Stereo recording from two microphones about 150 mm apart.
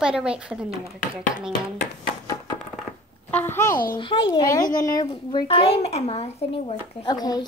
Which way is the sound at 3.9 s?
30° left (ahead or behind).